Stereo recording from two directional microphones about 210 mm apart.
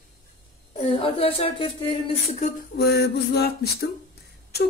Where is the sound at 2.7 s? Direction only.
50° left (ahead or behind).